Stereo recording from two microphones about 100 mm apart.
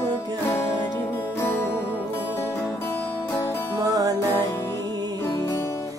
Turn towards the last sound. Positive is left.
turn(degrees=-35)  # may be behind; listen again after turning